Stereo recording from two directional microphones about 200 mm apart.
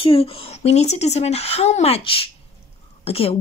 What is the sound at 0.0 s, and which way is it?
Speech, 25° left (ahead or behind).